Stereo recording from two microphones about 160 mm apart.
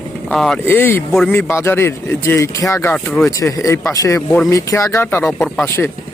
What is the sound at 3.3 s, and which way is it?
Speech, 20° left (ahead or behind).